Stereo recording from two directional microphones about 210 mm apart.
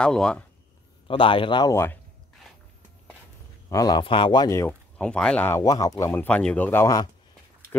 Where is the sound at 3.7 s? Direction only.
15° left (ahead or behind).